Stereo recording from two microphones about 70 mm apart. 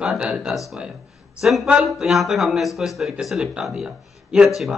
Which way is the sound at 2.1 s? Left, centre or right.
Centre.